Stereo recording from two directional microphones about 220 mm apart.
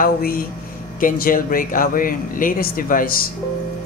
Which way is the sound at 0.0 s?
40° left (ahead or behind).